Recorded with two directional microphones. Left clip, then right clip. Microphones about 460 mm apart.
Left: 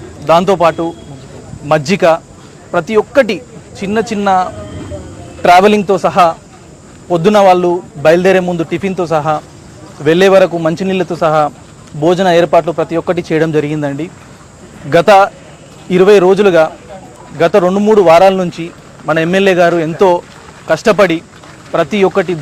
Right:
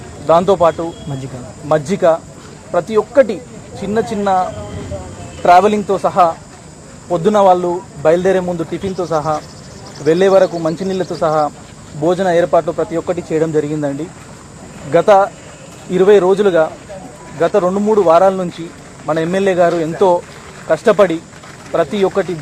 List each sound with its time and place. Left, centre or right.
0.3 s a man's voice: left